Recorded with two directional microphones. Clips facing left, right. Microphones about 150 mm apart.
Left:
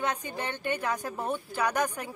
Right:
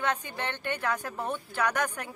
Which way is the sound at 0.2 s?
15° left (ahead or behind).